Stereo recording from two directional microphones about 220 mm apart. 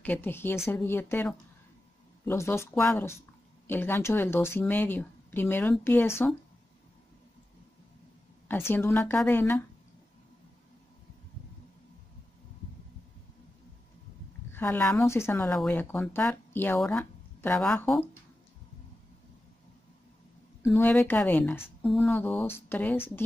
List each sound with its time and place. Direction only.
0.0 s speech: 10° left (ahead or behind)
8.5 s speech: 10° left (ahead or behind)
14.5 s speech: 10° left (ahead or behind)
20.6 s speech: 10° left (ahead or behind)